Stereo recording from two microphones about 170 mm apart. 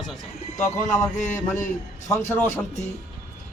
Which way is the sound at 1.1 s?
45° left (ahead or behind).